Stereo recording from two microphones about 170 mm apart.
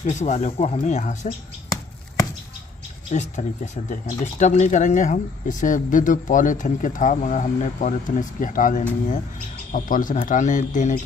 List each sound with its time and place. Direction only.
0.0 s speech: 45° left (ahead or behind)
3.1 s speech: 45° left (ahead or behind)